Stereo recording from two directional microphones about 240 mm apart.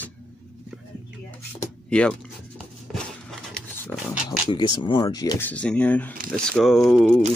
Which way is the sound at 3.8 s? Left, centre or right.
Centre.